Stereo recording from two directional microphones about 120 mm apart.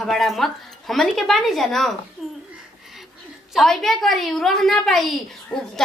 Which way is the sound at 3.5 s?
5° left (ahead or behind).